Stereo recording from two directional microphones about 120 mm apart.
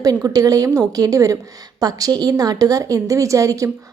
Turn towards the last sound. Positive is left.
turn(degrees=-25)  # may be behind; listen again after turning